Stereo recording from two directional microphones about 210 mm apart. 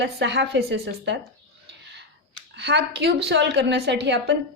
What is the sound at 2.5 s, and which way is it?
A woman's voice, 55° right (ahead or behind).